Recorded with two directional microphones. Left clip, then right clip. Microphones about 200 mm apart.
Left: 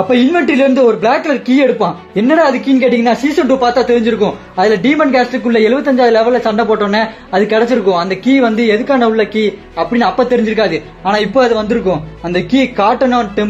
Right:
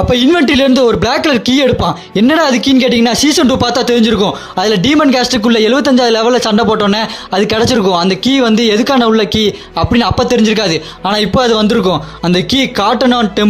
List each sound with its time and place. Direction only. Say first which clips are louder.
0.1 s speech: right 3 dB; 35° right (ahead or behind)